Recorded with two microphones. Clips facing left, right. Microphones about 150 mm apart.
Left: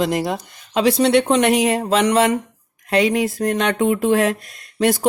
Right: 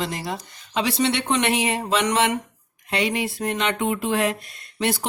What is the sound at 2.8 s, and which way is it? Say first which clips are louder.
Speech: left 7 dB; 45° left (ahead or behind).